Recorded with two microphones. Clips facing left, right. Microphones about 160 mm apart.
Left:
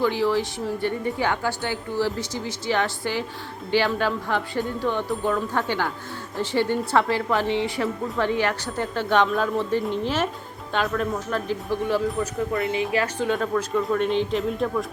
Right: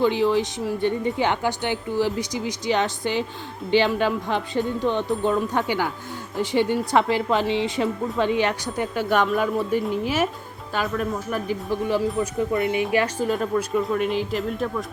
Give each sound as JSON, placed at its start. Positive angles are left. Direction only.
{"t": 0.0, "sound": "a woman's voice", "side_deg": -20}
{"t": 12.7, "sound": "a woman's voice", "side_deg": 30}
{"t": 13.1, "sound": "speech", "side_deg": -5}